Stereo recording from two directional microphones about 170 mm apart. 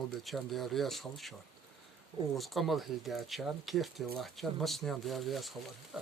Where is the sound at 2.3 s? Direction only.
Centre (ahead or behind).